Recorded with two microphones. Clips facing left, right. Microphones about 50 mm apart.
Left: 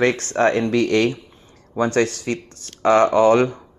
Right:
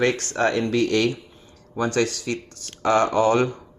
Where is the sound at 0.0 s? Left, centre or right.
Left.